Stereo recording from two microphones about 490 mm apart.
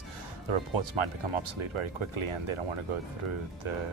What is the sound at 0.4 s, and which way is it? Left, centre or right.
Speech, right.